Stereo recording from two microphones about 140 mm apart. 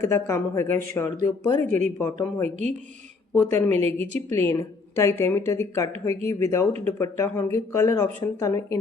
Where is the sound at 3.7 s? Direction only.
50° right (ahead or behind).